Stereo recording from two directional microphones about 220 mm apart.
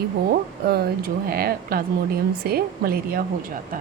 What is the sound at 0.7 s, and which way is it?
A woman's voice, 45° right (ahead or behind).